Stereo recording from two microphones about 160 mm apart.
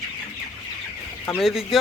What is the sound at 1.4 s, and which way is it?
Speech, centre (ahead or behind).